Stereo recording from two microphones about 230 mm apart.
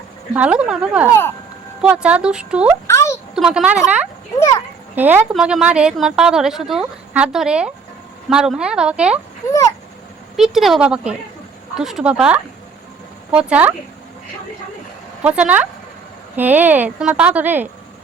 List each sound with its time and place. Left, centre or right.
0.3 s a woman's voice: centre
2.8 s a sound: centre
3.3 s a woman's voice: centre
4.4 s speech: centre
4.9 s a woman's voice: centre
10.3 s a woman's voice: centre
15.4 s a woman's voice: centre